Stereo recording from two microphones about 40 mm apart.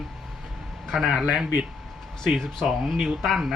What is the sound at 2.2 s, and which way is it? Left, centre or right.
Speech, centre.